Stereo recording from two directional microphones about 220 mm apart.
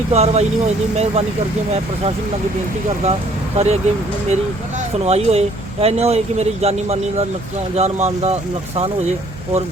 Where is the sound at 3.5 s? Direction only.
30° right (ahead or behind).